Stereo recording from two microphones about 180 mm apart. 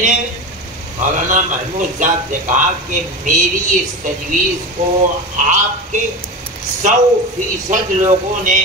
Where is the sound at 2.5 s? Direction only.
45° right (ahead or behind).